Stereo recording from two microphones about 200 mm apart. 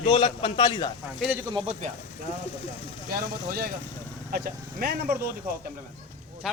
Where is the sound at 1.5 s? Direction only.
25° right (ahead or behind).